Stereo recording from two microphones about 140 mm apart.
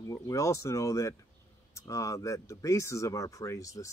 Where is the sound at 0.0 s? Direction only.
20° left (ahead or behind).